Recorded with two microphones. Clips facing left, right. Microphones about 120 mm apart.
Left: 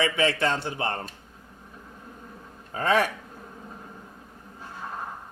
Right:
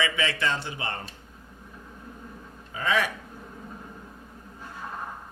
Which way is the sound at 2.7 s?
40° left (ahead or behind).